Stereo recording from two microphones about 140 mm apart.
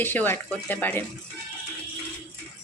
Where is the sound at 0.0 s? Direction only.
15° left (ahead or behind).